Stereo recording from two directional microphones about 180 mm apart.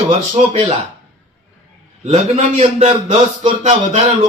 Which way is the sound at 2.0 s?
35° right (ahead or behind).